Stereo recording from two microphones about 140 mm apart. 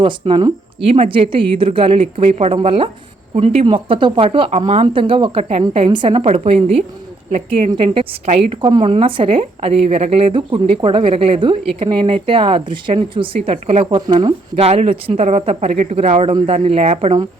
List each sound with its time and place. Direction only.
0.0 s speech: 35° right (ahead or behind); by 7.7 s 55° right (ahead or behind)
7.8 s speech: 40° right (ahead or behind)
14.2 s speech: 30° right (ahead or behind)
14.6 s speech: 45° right (ahead or behind)